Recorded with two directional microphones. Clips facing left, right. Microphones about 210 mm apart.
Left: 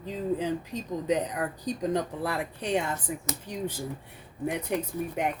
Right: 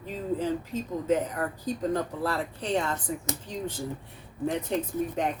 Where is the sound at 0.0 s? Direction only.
15° left (ahead or behind).